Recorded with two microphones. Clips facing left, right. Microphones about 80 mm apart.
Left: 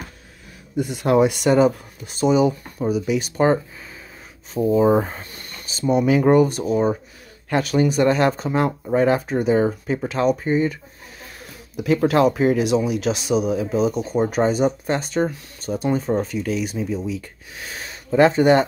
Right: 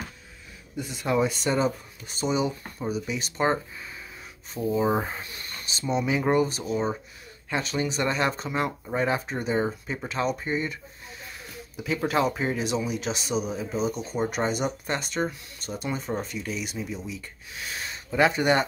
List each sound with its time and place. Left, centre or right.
0.7 s speech: left
4.6 s speech: left
4.8 s speech: centre
5.2 s speech: left
5.7 s speech: left
11.7 s speech: left